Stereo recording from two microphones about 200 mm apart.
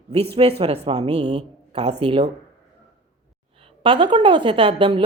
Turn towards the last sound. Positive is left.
turn(degrees=-25)  # may be behind; listen again after turning